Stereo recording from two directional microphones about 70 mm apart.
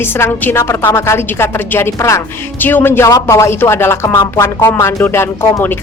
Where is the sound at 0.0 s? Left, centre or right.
Left.